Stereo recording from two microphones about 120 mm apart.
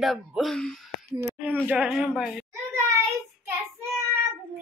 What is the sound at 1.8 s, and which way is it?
Speech, 5° right (ahead or behind).